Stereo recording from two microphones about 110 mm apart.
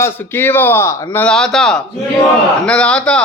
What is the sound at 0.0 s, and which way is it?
A man's voice, 20° left (ahead or behind).